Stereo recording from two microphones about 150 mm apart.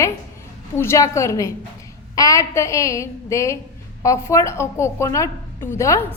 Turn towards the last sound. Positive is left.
turn(degrees=20)  # may be behind; listen again after turning